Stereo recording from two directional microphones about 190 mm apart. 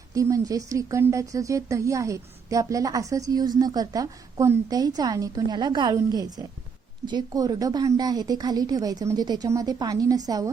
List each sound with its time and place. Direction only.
0.1 s a woman's voice: 15° right (ahead or behind)